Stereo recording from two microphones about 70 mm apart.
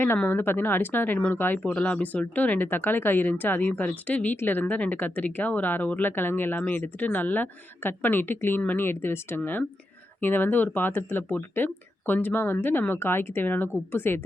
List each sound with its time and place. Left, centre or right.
0.3 s speech: left
1.5 s a woman's voice: centre; by 14.2 s left